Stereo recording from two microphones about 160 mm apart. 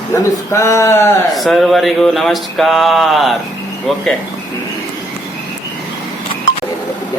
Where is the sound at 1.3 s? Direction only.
Centre (ahead or behind).